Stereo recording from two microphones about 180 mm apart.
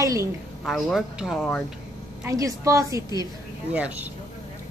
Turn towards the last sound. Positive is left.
turn(degrees=-10)  # may be behind; listen again after turning